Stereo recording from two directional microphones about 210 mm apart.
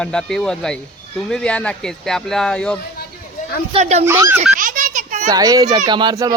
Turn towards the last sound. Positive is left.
turn(degrees=-15)  # may be behind; listen again after turning